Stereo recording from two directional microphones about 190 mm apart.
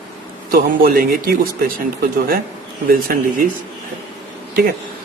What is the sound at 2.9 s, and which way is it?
Speech, 50° right (ahead or behind).